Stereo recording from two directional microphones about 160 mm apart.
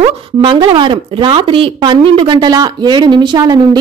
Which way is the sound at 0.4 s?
25° right (ahead or behind).